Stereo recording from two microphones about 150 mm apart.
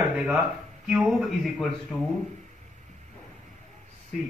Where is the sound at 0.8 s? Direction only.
5° right (ahead or behind).